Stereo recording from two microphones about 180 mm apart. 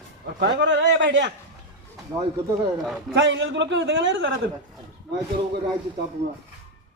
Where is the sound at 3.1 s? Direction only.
90° right.